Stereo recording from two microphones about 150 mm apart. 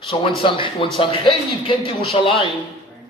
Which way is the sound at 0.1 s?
35° left (ahead or behind).